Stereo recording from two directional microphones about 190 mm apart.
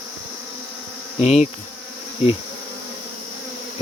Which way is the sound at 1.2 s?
35° left (ahead or behind).